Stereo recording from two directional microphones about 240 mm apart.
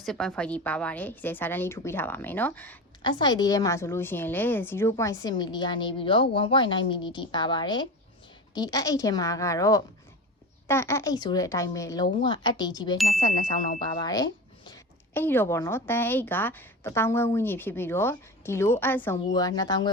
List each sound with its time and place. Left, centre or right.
0.0 s a woman's voice: centre
3.0 s a woman's voice: centre